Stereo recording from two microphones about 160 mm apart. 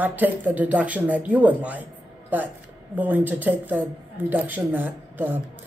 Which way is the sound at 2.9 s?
10° right (ahead or behind).